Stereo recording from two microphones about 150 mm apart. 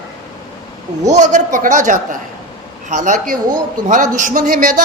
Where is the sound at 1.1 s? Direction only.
55° right (ahead or behind).